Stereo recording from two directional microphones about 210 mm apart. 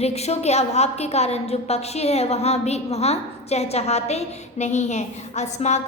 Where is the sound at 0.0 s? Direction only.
30° left (ahead or behind).